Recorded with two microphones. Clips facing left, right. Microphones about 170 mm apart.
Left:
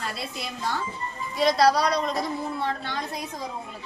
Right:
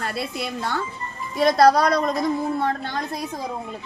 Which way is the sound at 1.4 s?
50° right (ahead or behind).